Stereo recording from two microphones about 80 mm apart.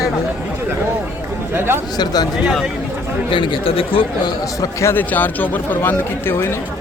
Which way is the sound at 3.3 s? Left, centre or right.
Left.